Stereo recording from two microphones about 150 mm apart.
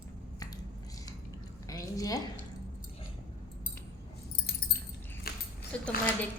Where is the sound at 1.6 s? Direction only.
20° left (ahead or behind).